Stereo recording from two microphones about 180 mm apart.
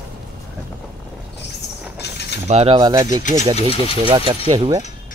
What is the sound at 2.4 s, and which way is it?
Speech, 35° right (ahead or behind).